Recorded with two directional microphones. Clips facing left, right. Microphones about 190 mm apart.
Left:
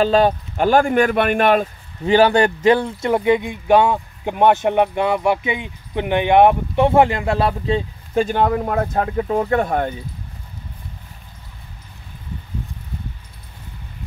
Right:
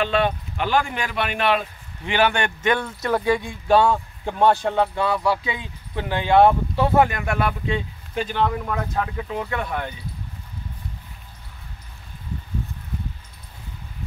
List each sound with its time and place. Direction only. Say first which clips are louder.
0.0 s speech: left 6 dB; 35° left (ahead or behind)